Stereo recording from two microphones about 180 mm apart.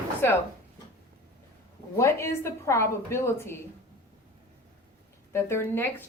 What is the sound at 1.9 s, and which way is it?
Speech, 15° left (ahead or behind).